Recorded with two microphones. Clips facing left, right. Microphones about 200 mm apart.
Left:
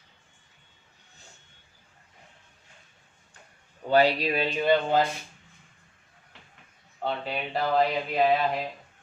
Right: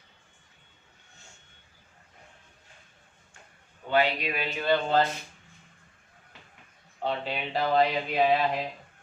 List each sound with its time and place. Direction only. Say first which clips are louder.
3.8 s speech: left 4 dB; 35° left (ahead or behind)
4.6 s a sound: left 1 dB; 15° left (ahead or behind)
7.0 s speech: even; centre (ahead or behind)